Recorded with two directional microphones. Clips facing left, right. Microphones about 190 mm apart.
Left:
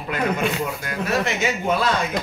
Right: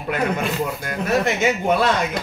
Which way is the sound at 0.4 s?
Centre (ahead or behind).